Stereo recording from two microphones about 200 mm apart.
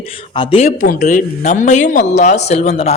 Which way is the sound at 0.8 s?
40° left (ahead or behind).